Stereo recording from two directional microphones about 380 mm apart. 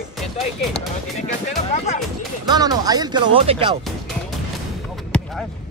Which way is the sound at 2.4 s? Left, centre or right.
Centre.